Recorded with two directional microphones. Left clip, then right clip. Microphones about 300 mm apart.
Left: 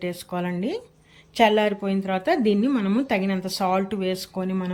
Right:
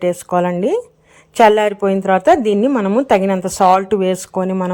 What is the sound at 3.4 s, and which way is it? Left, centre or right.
Speech, right.